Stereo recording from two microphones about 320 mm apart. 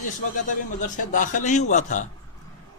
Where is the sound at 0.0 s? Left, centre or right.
Left.